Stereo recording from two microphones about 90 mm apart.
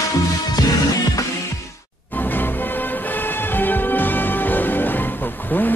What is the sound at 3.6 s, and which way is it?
Music, 20° left (ahead or behind).